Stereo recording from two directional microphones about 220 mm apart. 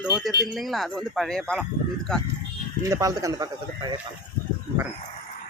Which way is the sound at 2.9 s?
15° right (ahead or behind).